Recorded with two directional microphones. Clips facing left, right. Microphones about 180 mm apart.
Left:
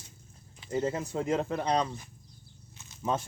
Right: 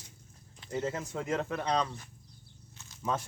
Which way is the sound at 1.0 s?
30° left (ahead or behind).